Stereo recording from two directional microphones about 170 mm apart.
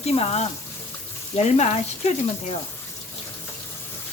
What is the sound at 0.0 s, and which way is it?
Speech, 35° left (ahead or behind).